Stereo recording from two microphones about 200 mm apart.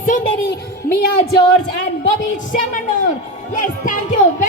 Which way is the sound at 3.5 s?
40° left (ahead or behind).